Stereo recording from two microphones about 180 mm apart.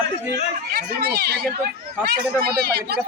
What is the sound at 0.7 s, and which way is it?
Speech, 60° right (ahead or behind).